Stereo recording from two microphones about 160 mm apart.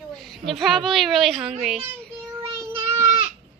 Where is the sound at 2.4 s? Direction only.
20° right (ahead or behind).